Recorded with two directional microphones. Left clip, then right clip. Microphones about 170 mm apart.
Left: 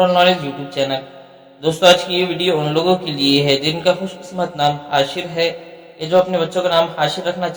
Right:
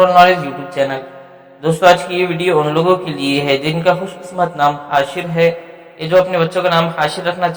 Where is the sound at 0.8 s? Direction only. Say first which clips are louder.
Right 3 dB; 5° right (ahead or behind).